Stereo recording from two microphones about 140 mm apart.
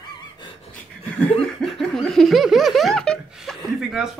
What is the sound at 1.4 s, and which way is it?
Laughter, 5° left (ahead or behind).